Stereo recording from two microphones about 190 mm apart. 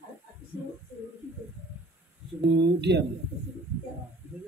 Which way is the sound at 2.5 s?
65° right (ahead or behind).